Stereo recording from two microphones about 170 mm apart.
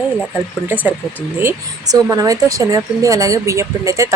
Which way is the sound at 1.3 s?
15° right (ahead or behind).